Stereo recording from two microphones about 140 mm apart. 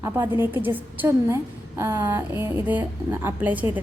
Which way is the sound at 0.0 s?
15° right (ahead or behind).